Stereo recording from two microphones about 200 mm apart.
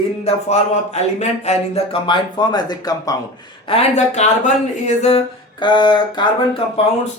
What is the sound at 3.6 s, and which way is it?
Speech, 30° left (ahead or behind).